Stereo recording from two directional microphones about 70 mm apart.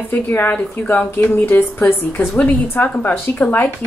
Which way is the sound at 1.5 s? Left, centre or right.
Left.